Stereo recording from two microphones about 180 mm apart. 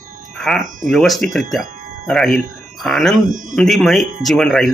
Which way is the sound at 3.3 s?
45° right (ahead or behind).